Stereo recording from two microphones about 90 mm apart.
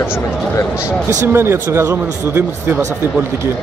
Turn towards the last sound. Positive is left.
turn(degrees=-30)  # may be behind; listen again after turning